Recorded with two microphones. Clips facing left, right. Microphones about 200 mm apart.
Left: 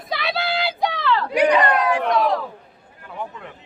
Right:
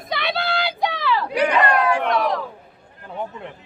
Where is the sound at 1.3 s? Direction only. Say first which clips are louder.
Left 2 dB; 15° left (ahead or behind).